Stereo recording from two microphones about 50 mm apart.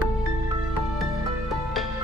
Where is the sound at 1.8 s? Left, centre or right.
Centre.